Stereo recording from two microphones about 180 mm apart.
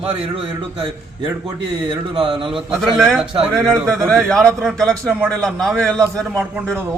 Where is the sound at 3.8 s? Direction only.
Centre (ahead or behind).